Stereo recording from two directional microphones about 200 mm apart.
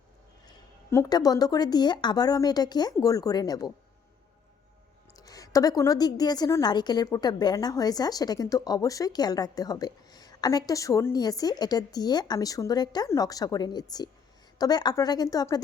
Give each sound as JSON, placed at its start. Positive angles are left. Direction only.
{"t": 0.4, "sound": "a woman's voice", "side_deg": 15}
{"t": 5.1, "sound": "a woman's voice", "side_deg": 15}